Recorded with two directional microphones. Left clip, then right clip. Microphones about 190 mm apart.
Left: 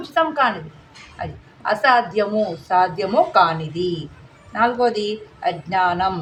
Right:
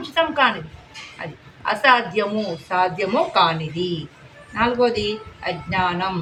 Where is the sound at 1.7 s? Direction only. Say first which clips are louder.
Even; 60° left (ahead or behind).